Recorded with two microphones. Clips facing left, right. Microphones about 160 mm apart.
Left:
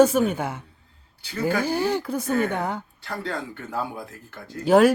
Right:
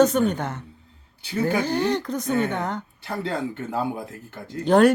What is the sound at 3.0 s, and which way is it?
Speech, 20° right (ahead or behind).